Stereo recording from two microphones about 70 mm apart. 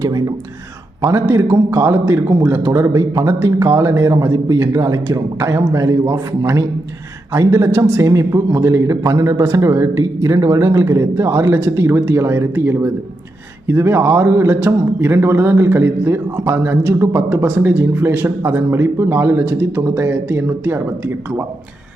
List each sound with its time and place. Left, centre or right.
0.0 s speech: right
1.0 s a man's voice: right
9.1 s a man's voice: right
10.0 s a man's voice: right